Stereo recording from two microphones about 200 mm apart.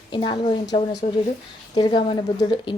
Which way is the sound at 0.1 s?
25° left (ahead or behind).